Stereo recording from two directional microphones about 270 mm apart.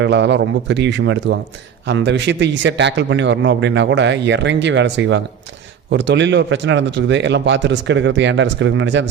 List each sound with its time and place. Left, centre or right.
0.0 s a man's voice: right